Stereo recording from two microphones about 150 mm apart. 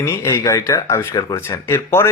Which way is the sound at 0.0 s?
15° left (ahead or behind).